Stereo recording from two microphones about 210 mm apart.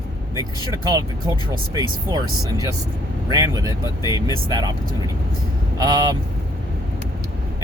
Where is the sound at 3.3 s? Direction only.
15° right (ahead or behind).